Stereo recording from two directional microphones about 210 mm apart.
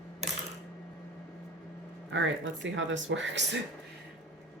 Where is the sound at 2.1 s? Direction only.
60° right (ahead or behind).